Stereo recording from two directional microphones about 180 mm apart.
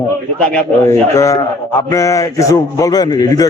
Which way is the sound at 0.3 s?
5° left (ahead or behind).